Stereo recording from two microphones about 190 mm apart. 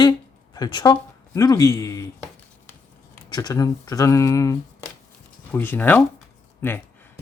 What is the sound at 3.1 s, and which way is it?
Speech, 20° left (ahead or behind).